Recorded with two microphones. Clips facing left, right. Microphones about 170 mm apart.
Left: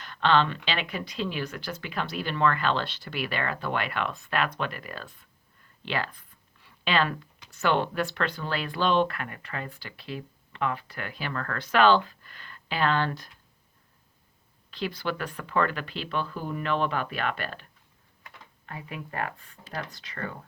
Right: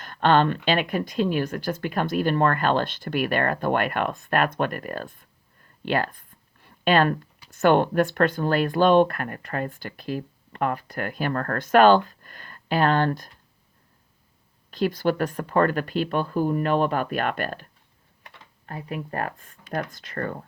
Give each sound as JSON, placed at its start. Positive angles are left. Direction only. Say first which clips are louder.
{"t": 0.0, "sound": "speech", "louder": "right 4 dB", "side_deg": -50}
{"t": 5.8, "sound": "a sound", "louder": "right 7 dB", "side_deg": -45}
{"t": 7.5, "sound": "speech", "louder": "right 7 dB", "side_deg": -50}
{"t": 14.7, "sound": "speech", "louder": "right 8 dB", "side_deg": -45}